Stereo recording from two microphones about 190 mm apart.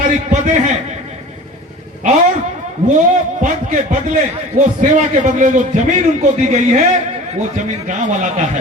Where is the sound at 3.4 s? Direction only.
45° right (ahead or behind).